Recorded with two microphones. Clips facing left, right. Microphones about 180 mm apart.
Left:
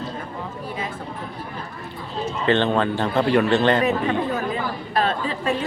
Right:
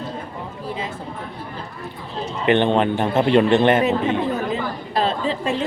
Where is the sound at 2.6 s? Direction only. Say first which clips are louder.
Right 3 dB; 20° right (ahead or behind).